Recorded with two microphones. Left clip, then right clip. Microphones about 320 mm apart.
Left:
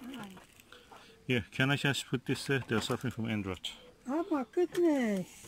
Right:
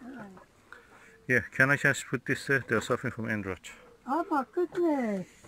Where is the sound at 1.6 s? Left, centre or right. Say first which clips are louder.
Right 6 dB; centre.